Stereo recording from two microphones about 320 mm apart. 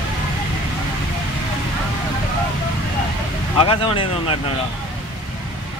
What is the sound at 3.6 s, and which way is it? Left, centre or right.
Speech, centre.